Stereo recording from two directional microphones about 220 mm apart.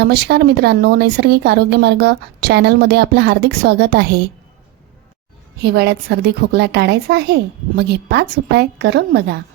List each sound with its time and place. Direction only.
0.0 s speech: 50° right (ahead or behind)
5.5 s speech: 50° right (ahead or behind)